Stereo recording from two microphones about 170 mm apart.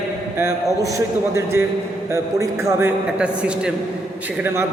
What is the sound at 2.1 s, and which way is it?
Speech, 15° right (ahead or behind).